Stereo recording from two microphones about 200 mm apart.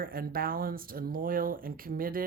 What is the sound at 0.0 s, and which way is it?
Speech, 50° right (ahead or behind).